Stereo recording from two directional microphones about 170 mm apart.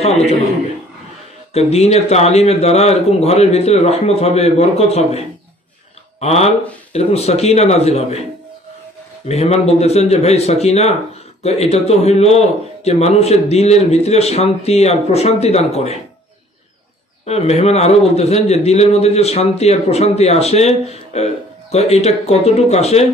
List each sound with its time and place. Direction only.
0.0 s a man's voice: 40° left (ahead or behind)
1.5 s a man's voice: 40° left (ahead or behind)
9.3 s a man's voice: 40° left (ahead or behind)
17.3 s a man's voice: 40° left (ahead or behind)